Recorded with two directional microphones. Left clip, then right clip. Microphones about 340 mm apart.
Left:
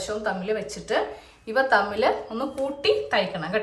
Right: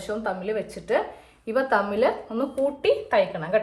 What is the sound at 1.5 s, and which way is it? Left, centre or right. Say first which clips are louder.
Speech: left 1 dB; centre.